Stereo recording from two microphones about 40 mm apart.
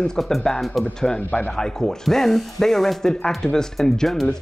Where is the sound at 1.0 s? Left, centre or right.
Centre.